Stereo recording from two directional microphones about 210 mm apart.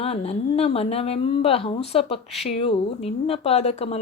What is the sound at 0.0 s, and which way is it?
Speech, 30° left (ahead or behind).